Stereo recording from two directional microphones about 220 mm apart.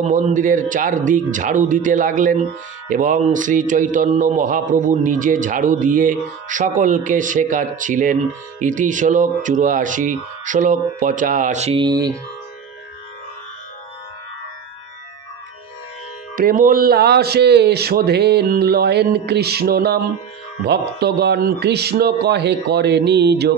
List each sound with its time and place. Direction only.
0.0 s a man's voice: 35° right (ahead or behind); by 12.1 s 20° right (ahead or behind)
16.3 s a man's voice: 40° right (ahead or behind)